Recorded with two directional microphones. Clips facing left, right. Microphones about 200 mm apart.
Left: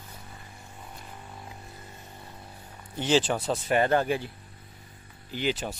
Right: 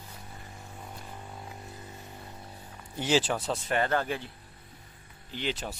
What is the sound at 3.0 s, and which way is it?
Speech, 10° right (ahead or behind).